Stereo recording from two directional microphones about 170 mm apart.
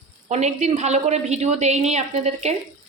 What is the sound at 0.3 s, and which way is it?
A woman's voice, 40° right (ahead or behind).